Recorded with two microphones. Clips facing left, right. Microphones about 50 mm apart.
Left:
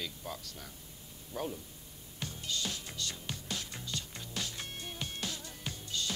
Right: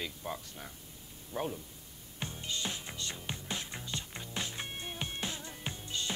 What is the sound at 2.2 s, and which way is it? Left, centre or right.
Music, right.